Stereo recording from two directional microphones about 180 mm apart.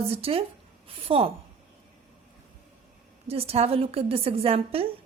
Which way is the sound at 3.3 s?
35° right (ahead or behind).